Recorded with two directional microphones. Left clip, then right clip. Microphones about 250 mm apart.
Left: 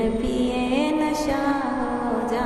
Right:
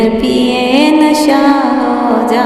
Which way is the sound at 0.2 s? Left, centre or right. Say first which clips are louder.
Right 13 dB; right.